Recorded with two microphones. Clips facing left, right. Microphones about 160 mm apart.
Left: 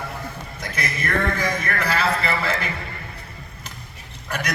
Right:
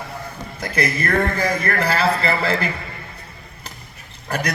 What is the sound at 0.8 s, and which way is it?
A man's voice, 30° right (ahead or behind).